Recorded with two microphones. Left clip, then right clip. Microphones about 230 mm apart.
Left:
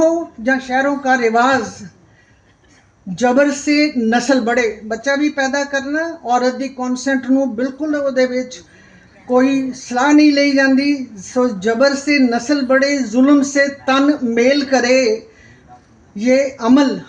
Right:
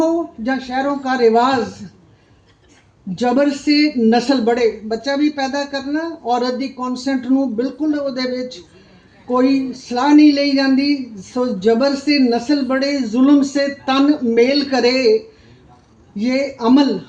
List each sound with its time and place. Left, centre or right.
0.4 s a man's voice: left
3.2 s a man's voice: left
9.9 s a man's voice: left
16.1 s a man's voice: left